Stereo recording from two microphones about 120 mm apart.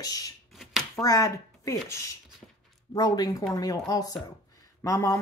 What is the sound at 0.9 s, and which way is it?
Speech, 30° left (ahead or behind).